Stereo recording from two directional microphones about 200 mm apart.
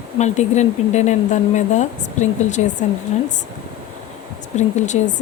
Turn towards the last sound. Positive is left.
turn(degrees=35)  # may be behind; listen again after turning